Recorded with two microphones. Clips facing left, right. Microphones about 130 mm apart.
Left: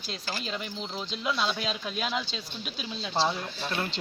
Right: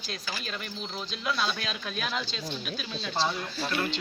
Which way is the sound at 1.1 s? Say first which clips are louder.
Left 1 dB; 20° left (ahead or behind).